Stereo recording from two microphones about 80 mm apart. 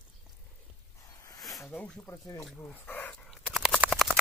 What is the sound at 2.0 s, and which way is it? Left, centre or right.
Speech, left.